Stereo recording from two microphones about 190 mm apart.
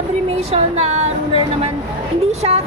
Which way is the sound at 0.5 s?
35° right (ahead or behind).